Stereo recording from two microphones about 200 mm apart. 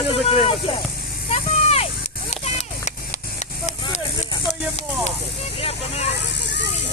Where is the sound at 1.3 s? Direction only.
30° left (ahead or behind).